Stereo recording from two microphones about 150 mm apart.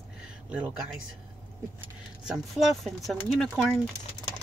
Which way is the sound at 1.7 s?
5° right (ahead or behind).